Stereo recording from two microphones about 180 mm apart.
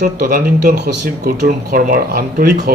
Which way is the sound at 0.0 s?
55° right (ahead or behind).